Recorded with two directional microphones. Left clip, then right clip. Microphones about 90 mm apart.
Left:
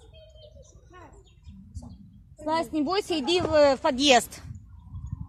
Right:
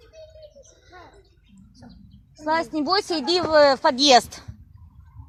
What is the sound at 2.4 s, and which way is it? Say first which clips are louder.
Speech: right 4 dB; 35° right (ahead or behind).